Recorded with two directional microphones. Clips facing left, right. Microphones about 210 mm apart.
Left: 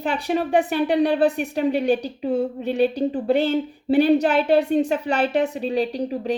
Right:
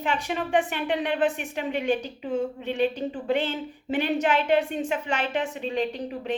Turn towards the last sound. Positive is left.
turn(degrees=35)  # may be behind; listen again after turning